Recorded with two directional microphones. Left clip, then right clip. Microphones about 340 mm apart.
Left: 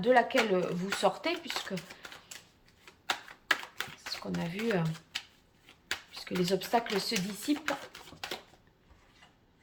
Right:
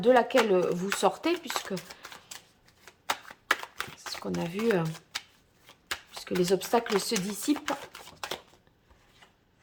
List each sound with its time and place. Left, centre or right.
0.0 s speech: centre
3.1 s a sound: centre
6.1 s speech: centre